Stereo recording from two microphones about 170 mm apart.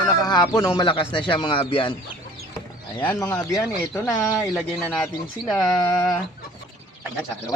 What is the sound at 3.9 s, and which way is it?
Speech, centre (ahead or behind).